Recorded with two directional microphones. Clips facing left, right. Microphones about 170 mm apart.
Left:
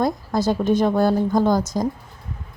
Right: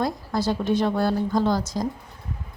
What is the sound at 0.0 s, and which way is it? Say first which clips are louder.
Speech: left 4 dB; 45° left (ahead or behind).